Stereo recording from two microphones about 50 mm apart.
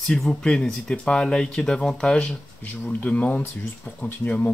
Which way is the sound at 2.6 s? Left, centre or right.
Left.